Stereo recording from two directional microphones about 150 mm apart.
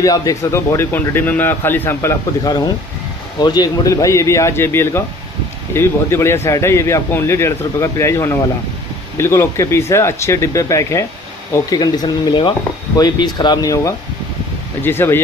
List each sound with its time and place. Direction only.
0.0 s speech: 20° left (ahead or behind)